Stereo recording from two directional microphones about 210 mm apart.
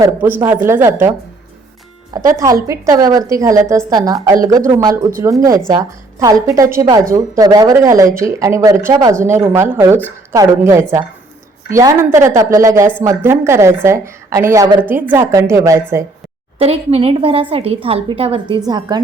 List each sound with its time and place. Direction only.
0.0 s a woman's voice: 10° right (ahead or behind)
2.1 s a woman's voice: 15° right (ahead or behind)
16.6 s a woman's voice: 30° right (ahead or behind)